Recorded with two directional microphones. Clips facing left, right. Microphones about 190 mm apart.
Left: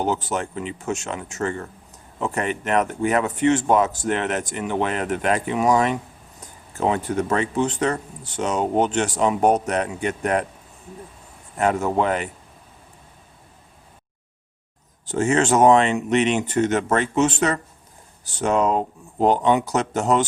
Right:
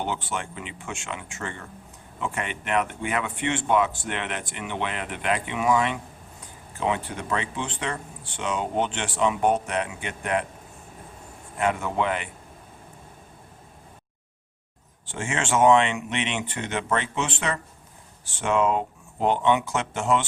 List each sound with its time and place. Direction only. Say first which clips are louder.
0.0 s speech: left 6 dB; 40° left (ahead or behind)
11.5 s speech: left 5 dB; 40° left (ahead or behind)
15.0 s speech: left 10 dB; 40° left (ahead or behind)